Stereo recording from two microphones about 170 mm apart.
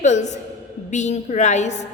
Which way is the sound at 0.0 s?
45° left (ahead or behind).